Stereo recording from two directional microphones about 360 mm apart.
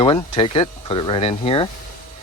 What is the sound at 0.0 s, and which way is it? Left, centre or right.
Speech, centre.